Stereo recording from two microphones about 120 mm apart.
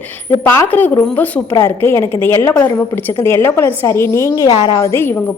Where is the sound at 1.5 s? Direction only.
25° left (ahead or behind).